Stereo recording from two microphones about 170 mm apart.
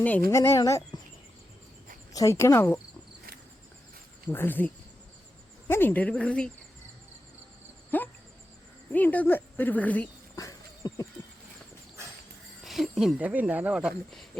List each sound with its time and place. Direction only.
0.3 s speech: 15° left (ahead or behind)
2.1 s speech: 15° left (ahead or behind)
4.3 s speech: 10° left (ahead or behind)
7.9 s a sound: 10° left (ahead or behind)
8.9 s speech: 10° left (ahead or behind)
10.3 s a sound: 20° left (ahead or behind)
12.6 s speech: centre (ahead or behind)